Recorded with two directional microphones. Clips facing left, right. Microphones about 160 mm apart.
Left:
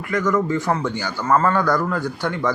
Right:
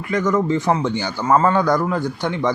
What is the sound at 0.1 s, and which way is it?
A man's voice, 20° right (ahead or behind).